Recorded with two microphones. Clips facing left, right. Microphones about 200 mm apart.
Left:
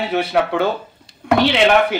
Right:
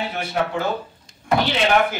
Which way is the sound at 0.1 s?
70° left (ahead or behind).